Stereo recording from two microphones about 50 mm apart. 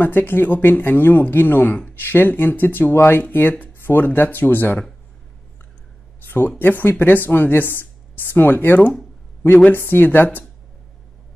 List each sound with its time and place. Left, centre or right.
0.0 s speech: left
6.2 s speech: left